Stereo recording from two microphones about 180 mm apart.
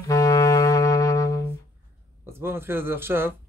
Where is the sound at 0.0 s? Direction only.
20° left (ahead or behind).